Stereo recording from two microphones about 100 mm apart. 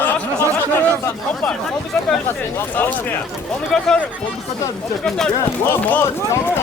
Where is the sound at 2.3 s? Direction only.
20° left (ahead or behind).